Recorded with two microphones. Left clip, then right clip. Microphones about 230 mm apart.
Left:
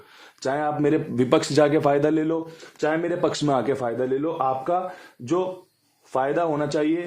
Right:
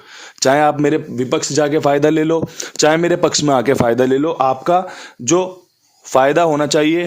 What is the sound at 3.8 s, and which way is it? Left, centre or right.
A man's voice, right.